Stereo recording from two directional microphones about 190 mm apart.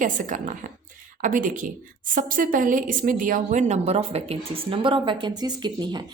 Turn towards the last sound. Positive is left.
turn(degrees=-25)  # may be behind; listen again after turning